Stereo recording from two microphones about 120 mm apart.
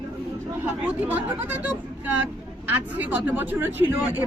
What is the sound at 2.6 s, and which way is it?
Speech, 15° right (ahead or behind).